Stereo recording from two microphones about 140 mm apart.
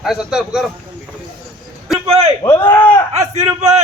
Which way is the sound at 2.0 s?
45° right (ahead or behind).